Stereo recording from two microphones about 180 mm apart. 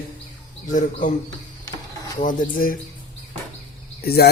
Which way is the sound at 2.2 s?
50° left (ahead or behind).